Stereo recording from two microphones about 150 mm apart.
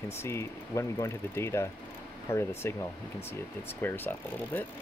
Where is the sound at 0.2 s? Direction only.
15° left (ahead or behind).